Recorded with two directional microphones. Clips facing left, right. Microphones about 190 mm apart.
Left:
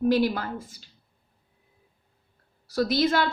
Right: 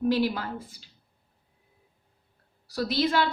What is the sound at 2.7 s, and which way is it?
Speech, 45° left (ahead or behind).